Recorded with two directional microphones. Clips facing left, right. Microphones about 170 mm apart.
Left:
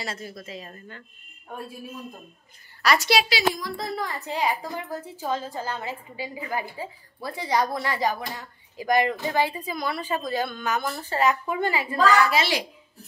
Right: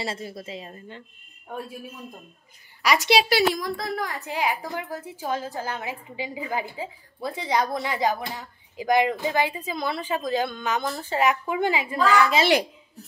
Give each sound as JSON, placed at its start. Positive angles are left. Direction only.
{"t": 0.0, "sound": "a woman's voice", "side_deg": -30}
{"t": 2.8, "sound": "a woman's voice", "side_deg": -15}
{"t": 3.3, "sound": "speech", "side_deg": -55}
{"t": 3.7, "sound": "a woman's voice", "side_deg": -5}